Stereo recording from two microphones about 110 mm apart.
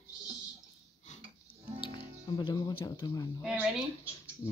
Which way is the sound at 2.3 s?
40° left (ahead or behind).